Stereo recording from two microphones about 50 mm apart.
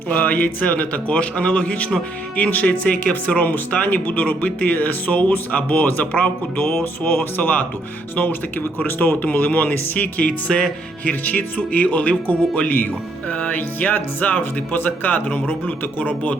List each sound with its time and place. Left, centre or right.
0.1 s speech: left
11.1 s speech: left